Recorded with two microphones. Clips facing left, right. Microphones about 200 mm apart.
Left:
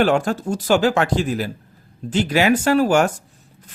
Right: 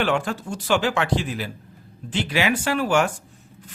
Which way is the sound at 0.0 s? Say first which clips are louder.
Left 6 dB; 40° left (ahead or behind).